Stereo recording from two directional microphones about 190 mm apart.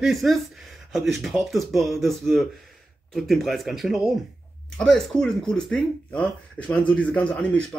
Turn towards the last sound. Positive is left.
turn(degrees=5)  # may be behind; listen again after turning